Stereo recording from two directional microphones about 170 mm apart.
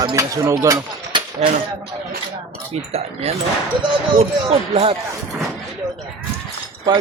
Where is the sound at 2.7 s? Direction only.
40° right (ahead or behind).